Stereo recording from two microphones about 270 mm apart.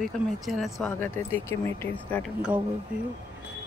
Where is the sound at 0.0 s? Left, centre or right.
Centre.